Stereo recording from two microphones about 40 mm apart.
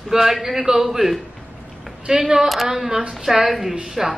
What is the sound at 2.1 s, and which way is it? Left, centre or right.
Speech, right.